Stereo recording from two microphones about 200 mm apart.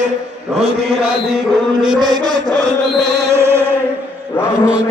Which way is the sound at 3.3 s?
10° right (ahead or behind).